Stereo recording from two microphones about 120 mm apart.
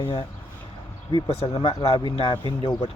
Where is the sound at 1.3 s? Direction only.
60° left (ahead or behind).